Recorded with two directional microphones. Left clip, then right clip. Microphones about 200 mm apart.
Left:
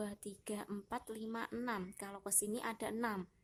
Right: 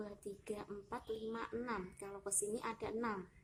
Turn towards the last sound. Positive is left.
turn(degrees=35)  # may be behind; listen again after turning